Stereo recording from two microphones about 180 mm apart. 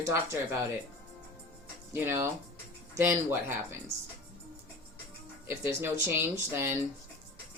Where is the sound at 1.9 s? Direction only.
15° right (ahead or behind).